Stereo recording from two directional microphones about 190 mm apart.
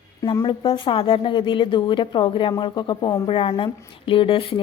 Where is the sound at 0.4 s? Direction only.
25° left (ahead or behind).